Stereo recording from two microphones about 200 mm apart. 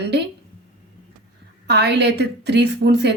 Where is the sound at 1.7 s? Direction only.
60° right (ahead or behind).